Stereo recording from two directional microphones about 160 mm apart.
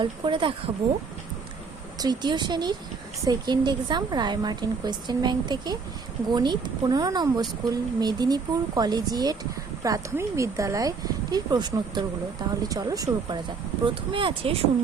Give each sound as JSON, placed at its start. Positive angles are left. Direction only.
{"t": 0.0, "sound": "speech", "side_deg": -30}
{"t": 2.0, "sound": "speech", "side_deg": -25}